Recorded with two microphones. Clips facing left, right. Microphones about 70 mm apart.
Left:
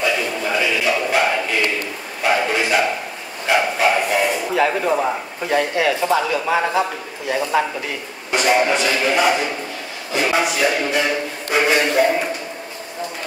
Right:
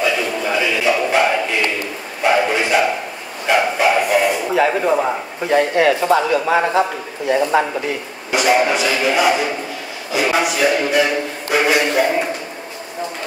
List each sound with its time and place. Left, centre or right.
0.0 s a sound: centre
3.4 s bow-wow: centre
6.3 s speech: right
8.3 s a man's voice: centre